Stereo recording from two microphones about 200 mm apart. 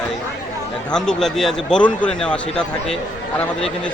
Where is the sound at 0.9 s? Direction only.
5° left (ahead or behind).